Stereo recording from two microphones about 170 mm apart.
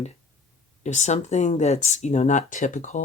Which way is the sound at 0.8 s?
45° left (ahead or behind).